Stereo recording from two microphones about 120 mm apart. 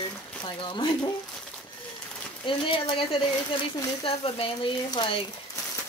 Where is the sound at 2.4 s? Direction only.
45° left (ahead or behind).